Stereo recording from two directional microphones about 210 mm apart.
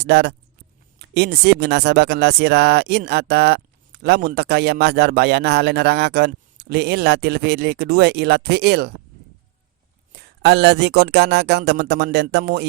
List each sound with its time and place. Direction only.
0.0 s speech: 50° right (ahead or behind)
10.1 s speech: 50° right (ahead or behind)